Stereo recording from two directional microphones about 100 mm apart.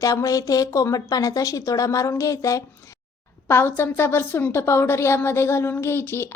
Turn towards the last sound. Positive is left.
turn(degrees=25)  # may be behind; listen again after turning